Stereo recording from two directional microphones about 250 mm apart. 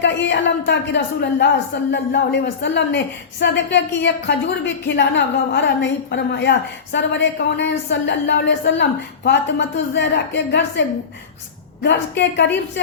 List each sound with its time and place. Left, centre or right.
0.0 s a woman's voice: left